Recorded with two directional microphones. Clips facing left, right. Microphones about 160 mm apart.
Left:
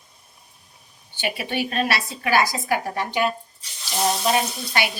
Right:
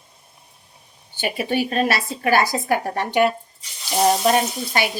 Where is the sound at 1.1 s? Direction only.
40° right (ahead or behind); by 3.3 s 60° right (ahead or behind).